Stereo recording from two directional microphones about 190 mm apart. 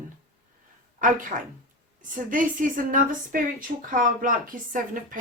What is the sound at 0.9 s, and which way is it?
A woman's voice, 45° right (ahead or behind).